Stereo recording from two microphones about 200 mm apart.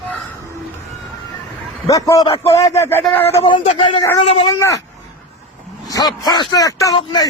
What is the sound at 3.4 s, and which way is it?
Speech, 30° left (ahead or behind).